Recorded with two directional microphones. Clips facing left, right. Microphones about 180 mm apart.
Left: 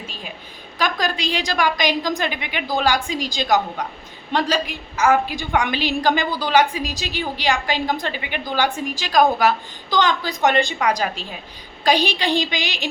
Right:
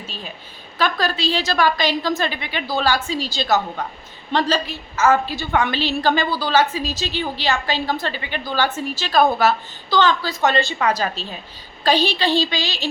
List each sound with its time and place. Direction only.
0.8 s a woman's voice: 15° left (ahead or behind)